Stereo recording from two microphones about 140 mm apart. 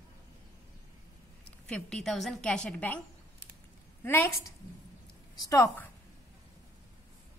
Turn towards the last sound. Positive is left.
turn(degrees=20)  # may be behind; listen again after turning